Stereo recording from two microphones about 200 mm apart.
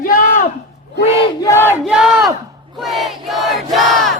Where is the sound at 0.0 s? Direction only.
45° left (ahead or behind).